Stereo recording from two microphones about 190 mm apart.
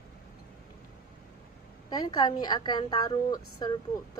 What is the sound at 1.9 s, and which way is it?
A woman's voice, 20° left (ahead or behind).